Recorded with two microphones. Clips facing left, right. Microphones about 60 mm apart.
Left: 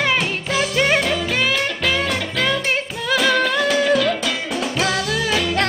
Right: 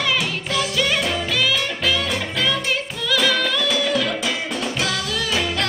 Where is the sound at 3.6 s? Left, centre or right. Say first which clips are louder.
Left 4 dB; left.